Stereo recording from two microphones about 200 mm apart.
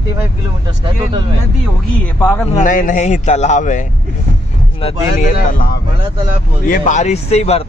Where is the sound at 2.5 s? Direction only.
40° left (ahead or behind).